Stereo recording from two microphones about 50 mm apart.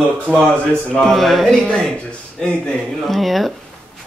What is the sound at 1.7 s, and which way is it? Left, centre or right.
Speech, centre.